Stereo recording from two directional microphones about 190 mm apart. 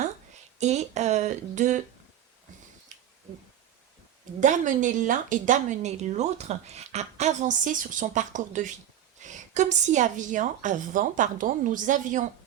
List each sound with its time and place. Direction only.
0.6 s speech: 35° right (ahead or behind)
4.4 s speech: 40° right (ahead or behind)